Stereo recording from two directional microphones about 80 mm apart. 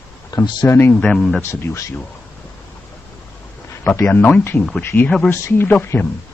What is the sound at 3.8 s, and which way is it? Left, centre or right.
Speech, left.